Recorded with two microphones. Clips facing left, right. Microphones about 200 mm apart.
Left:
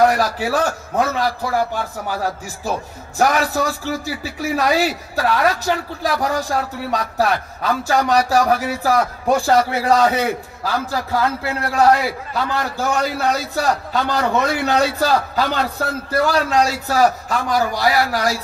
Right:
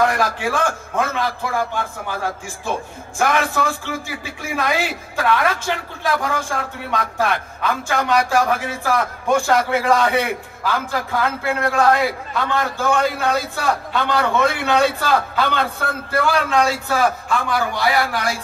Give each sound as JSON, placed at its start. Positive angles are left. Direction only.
{"t": 0.0, "sound": "a man's voice", "side_deg": 35}
{"t": 3.2, "sound": "a man's voice", "side_deg": 40}